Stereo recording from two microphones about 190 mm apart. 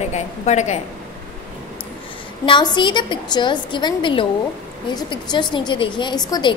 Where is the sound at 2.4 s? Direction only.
25° left (ahead or behind).